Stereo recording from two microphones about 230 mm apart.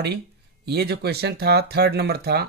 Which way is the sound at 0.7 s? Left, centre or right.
Right.